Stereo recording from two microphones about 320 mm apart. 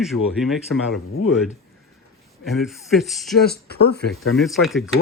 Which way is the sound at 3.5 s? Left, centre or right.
Left.